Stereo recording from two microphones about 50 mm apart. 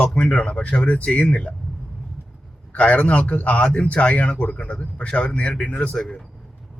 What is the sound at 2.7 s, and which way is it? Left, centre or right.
A man's voice, left.